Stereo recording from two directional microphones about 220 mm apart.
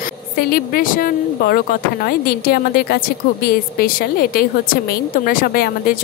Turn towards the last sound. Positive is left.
turn(degrees=45)  # may be behind; listen again after turning